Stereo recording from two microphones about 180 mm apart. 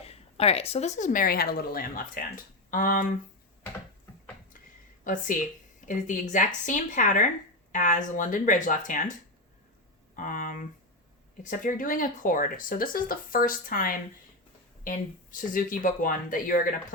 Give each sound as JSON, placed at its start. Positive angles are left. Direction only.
{"t": 0.0, "sound": "a woman's voice", "side_deg": 35}
{"t": 5.0, "sound": "a woman's voice", "side_deg": 45}
{"t": 10.2, "sound": "a woman's voice", "side_deg": 50}